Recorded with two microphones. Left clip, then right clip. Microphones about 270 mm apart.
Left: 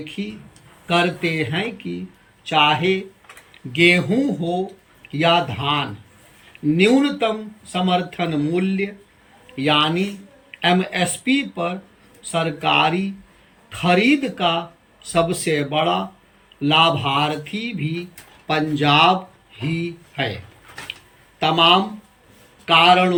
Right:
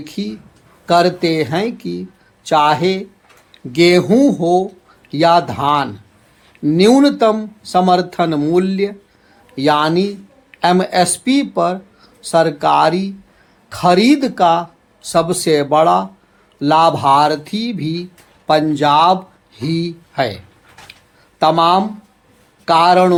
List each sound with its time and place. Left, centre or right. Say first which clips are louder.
0.2 s speech: right 5 dB; centre
21.4 s speech: right 3 dB; centre